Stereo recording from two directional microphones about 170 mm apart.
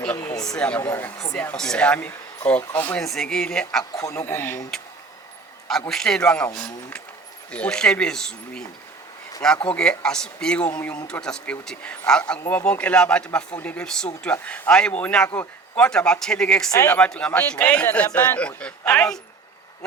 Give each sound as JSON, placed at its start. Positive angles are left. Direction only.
{"t": 0.0, "sound": "a man's voice", "side_deg": 10}
{"t": 3.9, "sound": "a man's voice", "side_deg": 20}
{"t": 5.9, "sound": "a man's voice", "side_deg": 5}
{"t": 9.6, "sound": "a man's voice", "side_deg": 5}
{"t": 16.7, "sound": "a man's voice", "side_deg": 15}
{"t": 17.0, "sound": "a man's voice", "side_deg": 5}